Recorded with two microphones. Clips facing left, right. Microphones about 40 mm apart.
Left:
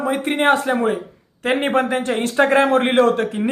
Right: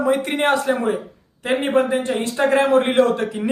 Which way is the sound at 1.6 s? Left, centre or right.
Left.